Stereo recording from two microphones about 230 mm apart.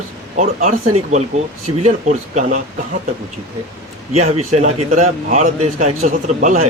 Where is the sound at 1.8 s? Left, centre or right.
Right.